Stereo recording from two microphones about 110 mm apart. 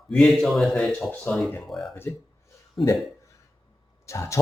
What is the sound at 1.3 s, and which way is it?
Speech, 10° left (ahead or behind).